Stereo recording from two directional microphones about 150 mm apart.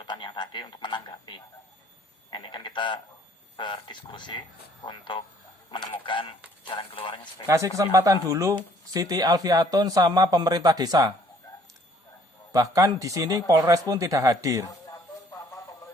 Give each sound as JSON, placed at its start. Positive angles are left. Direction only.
{"t": 0.0, "sound": "speech", "side_deg": 30}
{"t": 2.3, "sound": "speech", "side_deg": 30}
{"t": 7.4, "sound": "speech", "side_deg": -20}
{"t": 12.5, "sound": "speech", "side_deg": -25}